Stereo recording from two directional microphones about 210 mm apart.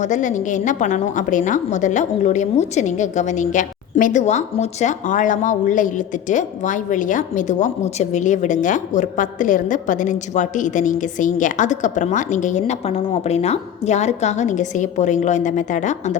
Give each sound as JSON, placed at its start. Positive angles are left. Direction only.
{"t": 0.0, "sound": "a woman's voice", "side_deg": 35}